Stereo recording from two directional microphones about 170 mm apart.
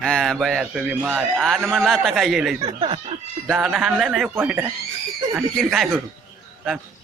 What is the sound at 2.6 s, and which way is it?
Speech, 25° right (ahead or behind).